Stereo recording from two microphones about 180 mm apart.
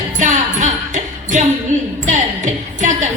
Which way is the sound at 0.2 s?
45° right (ahead or behind).